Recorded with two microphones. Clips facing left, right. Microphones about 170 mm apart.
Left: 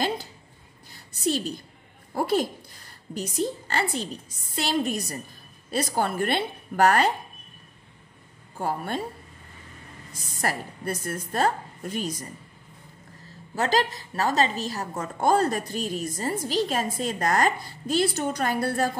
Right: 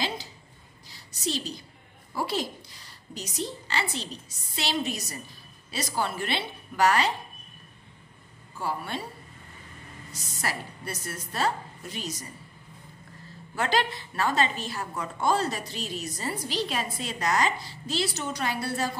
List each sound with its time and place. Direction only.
0.8 s a sound: 55° left (ahead or behind)
2.1 s a woman's voice: 50° left (ahead or behind)
8.5 s a woman's voice: 50° left (ahead or behind)
10.1 s a woman's voice: 50° left (ahead or behind)
13.6 s a woman's voice: 40° left (ahead or behind)